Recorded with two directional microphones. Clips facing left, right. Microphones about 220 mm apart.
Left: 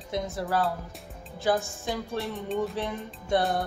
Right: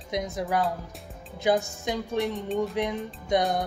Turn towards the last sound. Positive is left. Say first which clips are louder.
# right 1 dB
turn(degrees=-15)  # may be behind; listen again after turning